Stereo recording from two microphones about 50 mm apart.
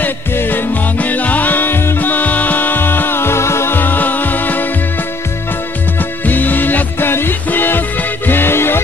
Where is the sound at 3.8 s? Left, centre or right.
Left.